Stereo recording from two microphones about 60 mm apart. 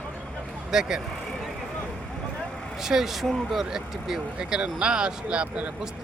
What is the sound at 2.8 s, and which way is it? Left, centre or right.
Speech, centre.